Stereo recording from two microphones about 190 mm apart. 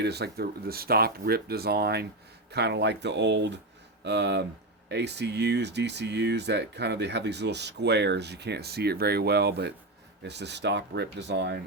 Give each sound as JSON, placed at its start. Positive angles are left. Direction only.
{"t": 0.0, "sound": "speech", "side_deg": -60}